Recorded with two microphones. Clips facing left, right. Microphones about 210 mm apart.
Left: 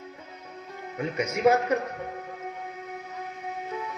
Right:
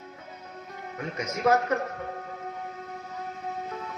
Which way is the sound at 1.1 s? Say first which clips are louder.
Left 2 dB; 10° left (ahead or behind).